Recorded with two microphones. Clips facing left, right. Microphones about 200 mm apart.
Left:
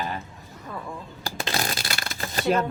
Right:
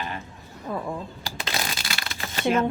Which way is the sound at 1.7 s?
40° left (ahead or behind).